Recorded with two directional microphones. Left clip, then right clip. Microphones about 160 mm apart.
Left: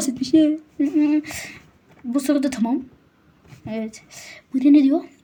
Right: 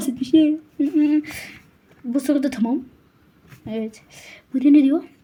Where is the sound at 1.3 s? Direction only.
25° left (ahead or behind).